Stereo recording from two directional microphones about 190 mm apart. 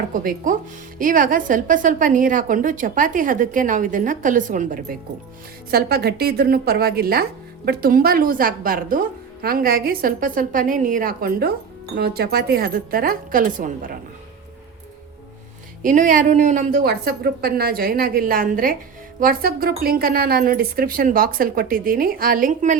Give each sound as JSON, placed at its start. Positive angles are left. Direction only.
{"t": 0.1, "sound": "a woman's voice", "side_deg": -45}
{"t": 5.7, "sound": "a woman's voice", "side_deg": -55}
{"t": 15.8, "sound": "a woman's voice", "side_deg": -45}